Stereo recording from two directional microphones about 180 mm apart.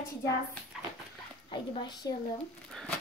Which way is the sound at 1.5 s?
25° left (ahead or behind).